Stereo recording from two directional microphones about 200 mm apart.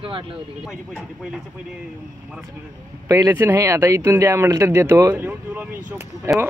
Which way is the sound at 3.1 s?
15° right (ahead or behind).